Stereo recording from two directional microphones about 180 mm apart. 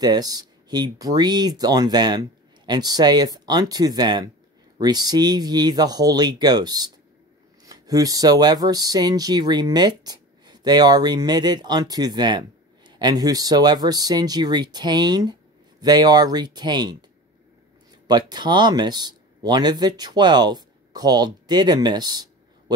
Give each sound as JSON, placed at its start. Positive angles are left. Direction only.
{"t": 0.0, "sound": "speech", "side_deg": -20}
{"t": 18.0, "sound": "speech", "side_deg": -25}